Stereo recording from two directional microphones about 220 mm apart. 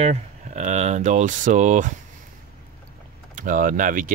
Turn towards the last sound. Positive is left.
turn(degrees=-40)  # may be behind; listen again after turning